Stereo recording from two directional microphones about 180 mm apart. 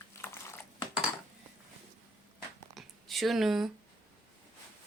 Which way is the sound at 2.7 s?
Centre (ahead or behind).